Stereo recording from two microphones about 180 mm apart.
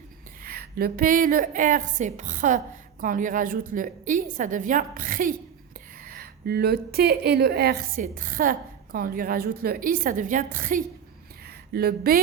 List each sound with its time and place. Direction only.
0.4 s a woman's voice: 55° right (ahead or behind)
11.4 s speech: 60° right (ahead or behind)